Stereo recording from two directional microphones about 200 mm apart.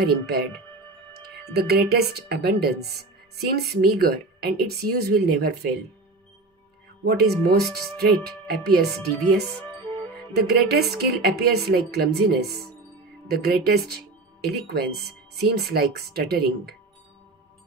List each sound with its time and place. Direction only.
0.0 s a woman's voice: 50° right (ahead or behind)
7.1 s a woman's voice: 55° right (ahead or behind)